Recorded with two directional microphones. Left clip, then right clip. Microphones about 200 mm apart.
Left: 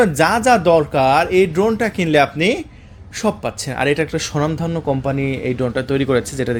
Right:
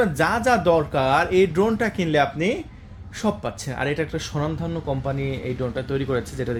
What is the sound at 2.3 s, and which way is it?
Speech, 40° left (ahead or behind).